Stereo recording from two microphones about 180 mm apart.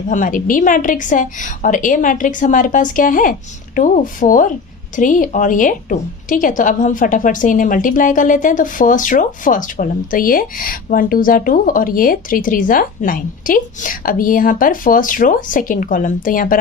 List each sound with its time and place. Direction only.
0.1 s a woman's voice: 45° left (ahead or behind)